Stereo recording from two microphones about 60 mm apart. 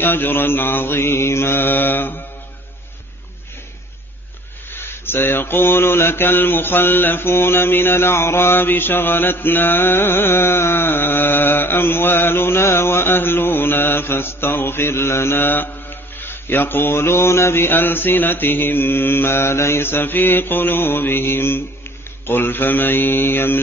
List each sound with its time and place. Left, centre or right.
0.0 s mantra: left
4.7 s mantra: left